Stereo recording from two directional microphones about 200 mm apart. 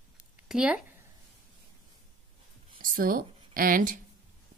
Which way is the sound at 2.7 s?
45° right (ahead or behind).